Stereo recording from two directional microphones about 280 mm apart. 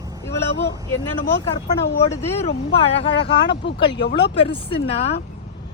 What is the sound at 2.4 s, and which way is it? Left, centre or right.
Speech, left.